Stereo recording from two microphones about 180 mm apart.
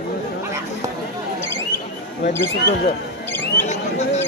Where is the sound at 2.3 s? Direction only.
10° left (ahead or behind).